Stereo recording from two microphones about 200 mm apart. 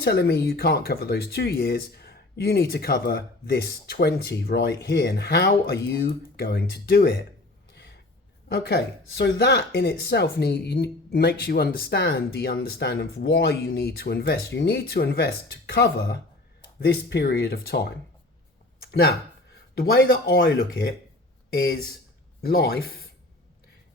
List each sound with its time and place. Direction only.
0.0 s speech: 55° left (ahead or behind)
8.4 s speech: 55° left (ahead or behind)
18.8 s a sound: 50° left (ahead or behind)
19.7 s speech: 50° left (ahead or behind)